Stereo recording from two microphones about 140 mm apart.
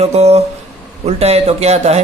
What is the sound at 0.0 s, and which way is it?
A man's voice, 50° right (ahead or behind).